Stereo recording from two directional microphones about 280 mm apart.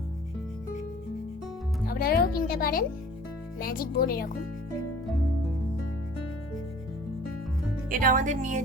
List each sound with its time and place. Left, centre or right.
1.9 s speech: left
7.9 s speech: right